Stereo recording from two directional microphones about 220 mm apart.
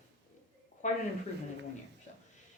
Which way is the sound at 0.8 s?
35° left (ahead or behind).